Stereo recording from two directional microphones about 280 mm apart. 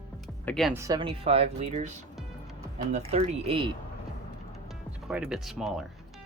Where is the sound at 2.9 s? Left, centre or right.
Right.